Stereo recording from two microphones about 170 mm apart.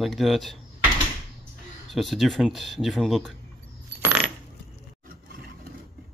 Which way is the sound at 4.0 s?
10° right (ahead or behind).